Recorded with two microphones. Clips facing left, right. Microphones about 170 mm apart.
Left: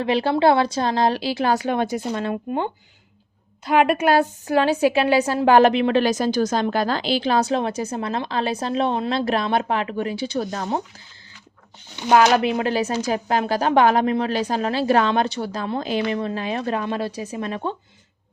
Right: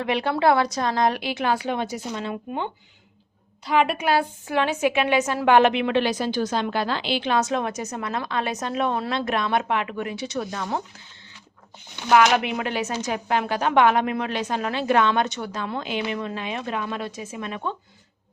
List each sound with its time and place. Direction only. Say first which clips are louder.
0.0 s a woman's voice: left 3 dB; 30° left (ahead or behind); by 2.6 s 50° left (ahead or behind)
3.7 s a woman's voice: left 4 dB; 50° left (ahead or behind)
12.1 s a woman's voice: left 2 dB; 35° left (ahead or behind)